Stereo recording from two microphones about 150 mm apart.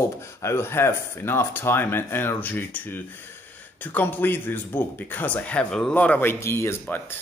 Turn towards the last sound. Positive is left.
turn(degrees=15)  # may be behind; listen again after turning